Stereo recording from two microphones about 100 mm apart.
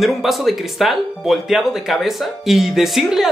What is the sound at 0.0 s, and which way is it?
Speech, centre (ahead or behind).